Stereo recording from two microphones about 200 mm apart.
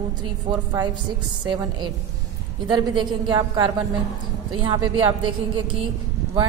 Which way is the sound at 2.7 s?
25° right (ahead or behind).